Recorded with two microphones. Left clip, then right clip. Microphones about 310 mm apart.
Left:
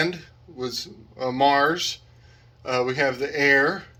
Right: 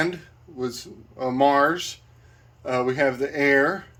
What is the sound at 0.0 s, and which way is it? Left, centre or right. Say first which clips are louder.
Speech: even; centre.